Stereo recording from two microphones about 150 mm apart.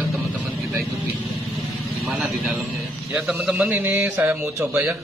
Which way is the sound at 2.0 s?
Centre (ahead or behind).